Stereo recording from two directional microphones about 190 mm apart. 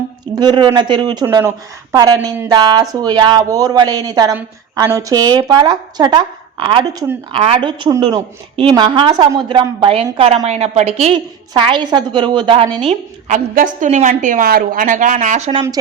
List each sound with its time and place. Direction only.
0.3 s a woman's voice: 25° right (ahead or behind)
12.9 s a woman's voice: 40° right (ahead or behind)